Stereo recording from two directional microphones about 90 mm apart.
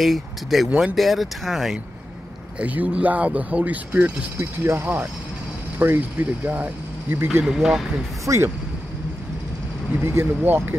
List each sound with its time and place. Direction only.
0.0 s speech: centre (ahead or behind)
0.7 s speech: 15° right (ahead or behind)
0.9 s speech: centre (ahead or behind)
2.6 s speech: 15° right (ahead or behind)
4.4 s speech: 25° right (ahead or behind)
7.4 s speech: 5° right (ahead or behind)
8.3 s speech: 35° right (ahead or behind)
10.0 s speech: 25° right (ahead or behind)